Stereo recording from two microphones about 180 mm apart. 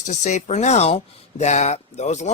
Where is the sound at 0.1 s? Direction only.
40° left (ahead or behind).